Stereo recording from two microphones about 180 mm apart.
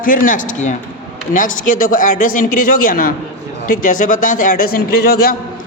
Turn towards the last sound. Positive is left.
turn(degrees=60)  # may be behind; listen again after turning